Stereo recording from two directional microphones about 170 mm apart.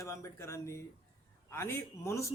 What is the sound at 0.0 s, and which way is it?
Speech, 15° left (ahead or behind).